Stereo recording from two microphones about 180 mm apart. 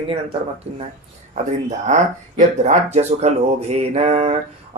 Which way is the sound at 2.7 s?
35° right (ahead or behind).